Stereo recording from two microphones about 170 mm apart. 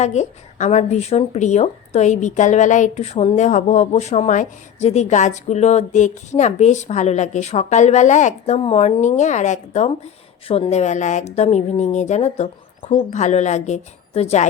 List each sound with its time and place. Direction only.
0.0 s speech: 45° left (ahead or behind)